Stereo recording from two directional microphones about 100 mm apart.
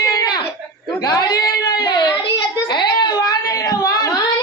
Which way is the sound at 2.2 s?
50° left (ahead or behind).